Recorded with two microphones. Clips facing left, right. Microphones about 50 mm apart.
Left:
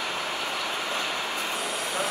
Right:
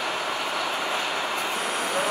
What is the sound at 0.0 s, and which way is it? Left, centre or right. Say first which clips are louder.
Vehicle: right 3 dB; centre.